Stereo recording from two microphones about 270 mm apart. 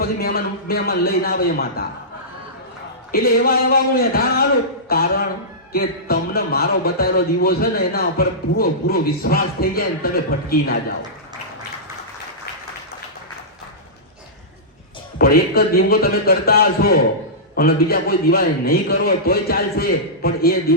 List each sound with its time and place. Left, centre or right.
0.0 s speech: left
3.1 s speech: left
15.2 s speech: left